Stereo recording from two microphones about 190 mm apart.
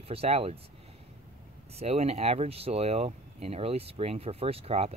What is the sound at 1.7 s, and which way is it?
Speech, 30° right (ahead or behind).